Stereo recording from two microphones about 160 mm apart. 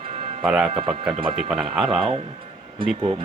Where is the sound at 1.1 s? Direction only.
35° right (ahead or behind).